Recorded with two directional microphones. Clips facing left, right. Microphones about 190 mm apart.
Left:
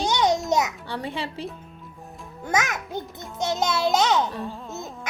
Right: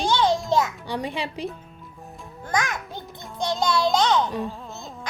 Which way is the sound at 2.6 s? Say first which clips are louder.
Left 1 dB; 20° left (ahead or behind).